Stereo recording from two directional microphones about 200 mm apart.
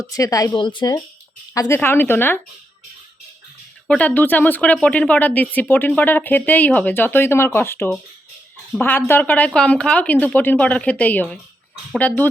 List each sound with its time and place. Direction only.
0.0 s a woman's voice: 15° left (ahead or behind)
3.8 s speech: 5° left (ahead or behind)